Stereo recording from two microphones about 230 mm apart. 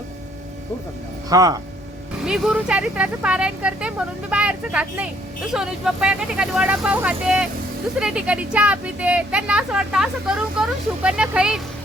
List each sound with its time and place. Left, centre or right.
1.3 s speech: centre
2.2 s speech: centre